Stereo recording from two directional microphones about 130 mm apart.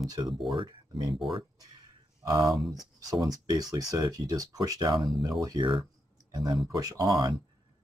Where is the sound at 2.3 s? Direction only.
30° right (ahead or behind).